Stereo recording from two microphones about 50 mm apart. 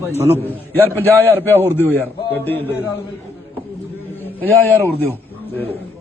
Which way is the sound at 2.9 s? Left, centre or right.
Left.